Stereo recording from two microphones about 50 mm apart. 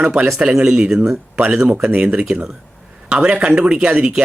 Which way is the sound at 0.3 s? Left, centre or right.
Centre.